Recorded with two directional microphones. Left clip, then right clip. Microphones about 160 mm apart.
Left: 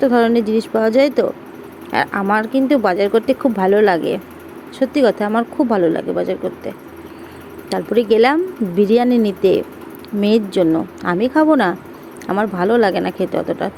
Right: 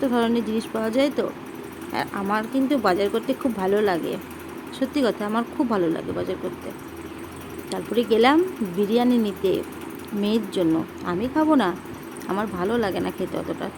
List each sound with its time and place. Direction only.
0.0 s speech: 30° left (ahead or behind)
7.7 s speech: 30° left (ahead or behind)